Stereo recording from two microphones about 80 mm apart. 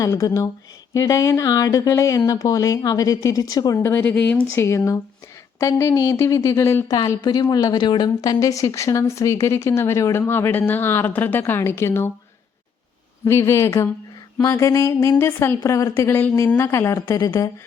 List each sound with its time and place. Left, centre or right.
0.0 s speech: left
4.0 s speech: centre
4.5 s speech: left
5.8 s speech: left
6.8 s speech: left
8.2 s speech: left
13.2 s speech: left
15.1 s speech: left